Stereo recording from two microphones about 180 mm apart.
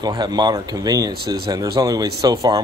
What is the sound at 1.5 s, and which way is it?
Speech, 20° right (ahead or behind).